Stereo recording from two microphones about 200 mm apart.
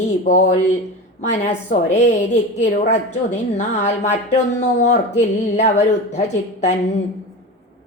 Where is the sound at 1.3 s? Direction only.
35° left (ahead or behind).